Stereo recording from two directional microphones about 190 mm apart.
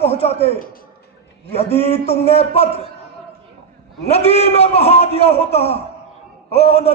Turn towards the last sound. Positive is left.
turn(degrees=35)  # may be behind; listen again after turning